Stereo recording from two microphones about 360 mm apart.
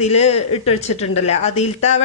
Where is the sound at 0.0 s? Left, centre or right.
Centre.